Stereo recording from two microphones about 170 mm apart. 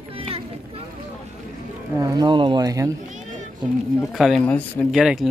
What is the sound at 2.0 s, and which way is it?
Speech, 20° right (ahead or behind).